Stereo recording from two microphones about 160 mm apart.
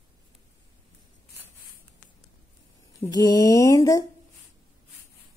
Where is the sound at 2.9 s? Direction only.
20° left (ahead or behind).